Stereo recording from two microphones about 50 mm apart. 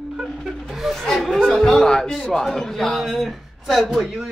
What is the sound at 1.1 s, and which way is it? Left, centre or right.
A man's voice, centre.